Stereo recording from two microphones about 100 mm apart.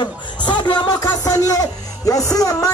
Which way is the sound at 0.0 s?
50° left (ahead or behind).